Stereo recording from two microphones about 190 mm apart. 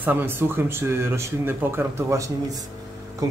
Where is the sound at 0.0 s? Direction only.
10° right (ahead or behind).